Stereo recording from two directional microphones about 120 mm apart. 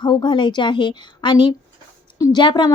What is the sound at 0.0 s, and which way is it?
A woman's voice, 40° left (ahead or behind).